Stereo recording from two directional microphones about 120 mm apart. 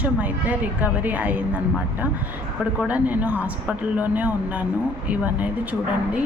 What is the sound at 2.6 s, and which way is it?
A woman's voice, 10° right (ahead or behind).